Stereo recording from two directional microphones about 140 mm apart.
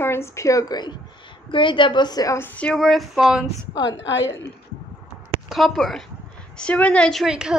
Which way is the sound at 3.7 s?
30° left (ahead or behind).